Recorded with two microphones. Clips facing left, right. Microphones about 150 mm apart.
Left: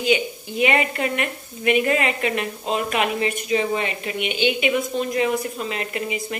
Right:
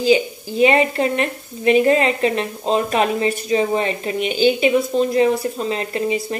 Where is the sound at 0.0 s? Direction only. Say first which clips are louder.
Right 5 dB; 35° right (ahead or behind).